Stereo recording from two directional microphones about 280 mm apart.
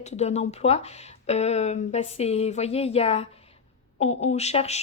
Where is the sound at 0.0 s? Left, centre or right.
Left.